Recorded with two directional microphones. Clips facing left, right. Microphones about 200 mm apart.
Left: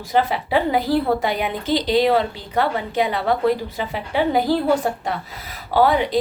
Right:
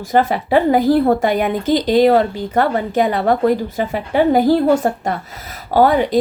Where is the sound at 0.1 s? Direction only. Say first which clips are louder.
Right 5 dB; 45° right (ahead or behind).